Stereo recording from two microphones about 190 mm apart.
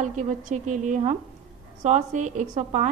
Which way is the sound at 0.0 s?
40° right (ahead or behind).